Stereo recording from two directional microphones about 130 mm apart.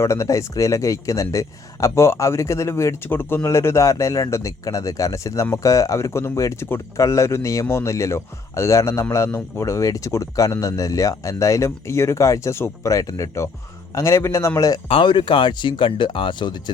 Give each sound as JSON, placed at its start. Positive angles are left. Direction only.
{"t": 0.0, "sound": "speech", "side_deg": 20}
{"t": 14.8, "sound": "speech", "side_deg": 40}